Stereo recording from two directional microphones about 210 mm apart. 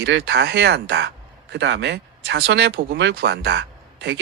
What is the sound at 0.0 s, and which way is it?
Speech, 55° right (ahead or behind).